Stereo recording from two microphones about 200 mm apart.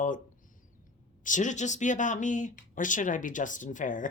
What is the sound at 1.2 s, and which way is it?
A woman's voice, 40° left (ahead or behind).